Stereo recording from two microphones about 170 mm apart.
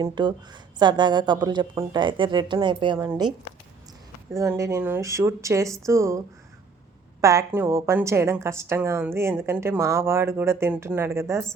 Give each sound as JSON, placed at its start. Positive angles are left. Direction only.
{"t": 0.0, "sound": "a woman's voice", "side_deg": -25}
{"t": 4.3, "sound": "a woman's voice", "side_deg": -20}